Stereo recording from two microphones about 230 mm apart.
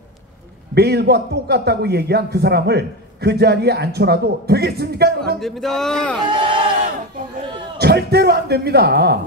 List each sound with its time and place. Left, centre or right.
0.7 s a man's voice: right
5.4 s speech: centre
6.2 s speech: right
7.7 s a man's voice: right